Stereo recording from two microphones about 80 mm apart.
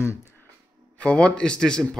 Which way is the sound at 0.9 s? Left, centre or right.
Centre.